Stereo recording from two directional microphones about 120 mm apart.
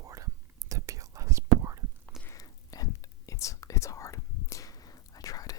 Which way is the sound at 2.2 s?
30° left (ahead or behind).